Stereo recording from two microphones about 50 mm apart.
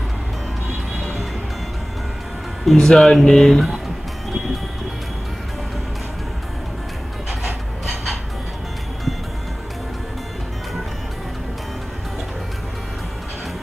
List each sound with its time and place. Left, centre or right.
2.6 s speech: centre
7.2 s music: centre